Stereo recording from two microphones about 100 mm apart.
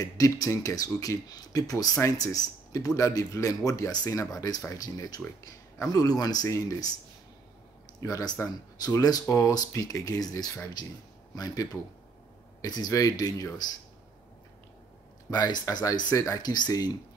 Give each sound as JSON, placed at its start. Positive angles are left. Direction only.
{"t": 0.0, "sound": "speech", "side_deg": 35}
{"t": 8.0, "sound": "speech", "side_deg": 35}
{"t": 15.3, "sound": "speech", "side_deg": 45}